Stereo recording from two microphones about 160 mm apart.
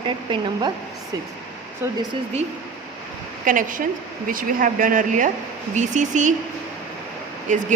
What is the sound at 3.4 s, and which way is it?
A woman's voice, 55° right (ahead or behind).